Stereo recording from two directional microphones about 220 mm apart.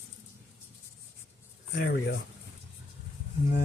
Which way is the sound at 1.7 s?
55° left (ahead or behind).